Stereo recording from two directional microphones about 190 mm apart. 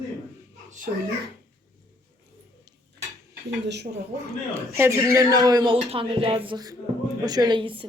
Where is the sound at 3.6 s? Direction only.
65° right (ahead or behind).